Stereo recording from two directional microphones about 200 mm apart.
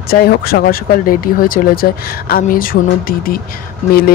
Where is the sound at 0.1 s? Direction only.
50° left (ahead or behind).